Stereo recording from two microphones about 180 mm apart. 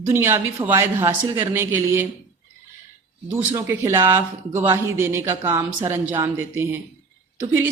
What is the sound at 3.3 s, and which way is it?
Speech, 15° right (ahead or behind).